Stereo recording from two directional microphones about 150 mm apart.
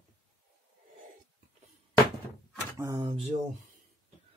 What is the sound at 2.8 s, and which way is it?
Speech, 25° right (ahead or behind).